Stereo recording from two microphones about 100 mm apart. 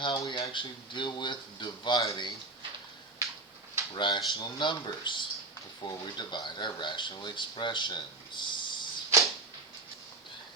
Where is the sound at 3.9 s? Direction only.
50° left (ahead or behind).